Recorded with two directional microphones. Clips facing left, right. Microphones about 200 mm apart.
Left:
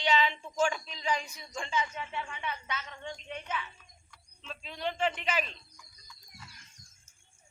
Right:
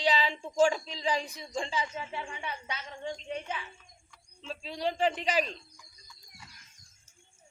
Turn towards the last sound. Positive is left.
turn(degrees=-35)  # may be behind; listen again after turning